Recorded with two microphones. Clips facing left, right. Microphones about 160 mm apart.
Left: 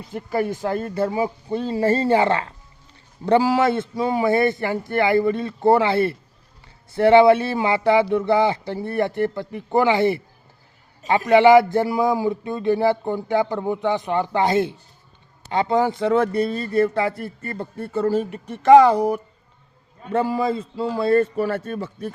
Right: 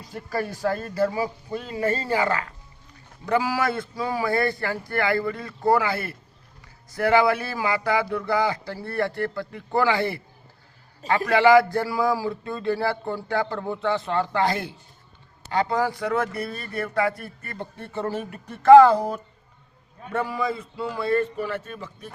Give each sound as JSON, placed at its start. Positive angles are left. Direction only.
{"t": 0.0, "sound": "a sound", "side_deg": 25}
{"t": 18.3, "sound": "speech", "side_deg": 20}
{"t": 20.1, "sound": "a man's voice", "side_deg": 30}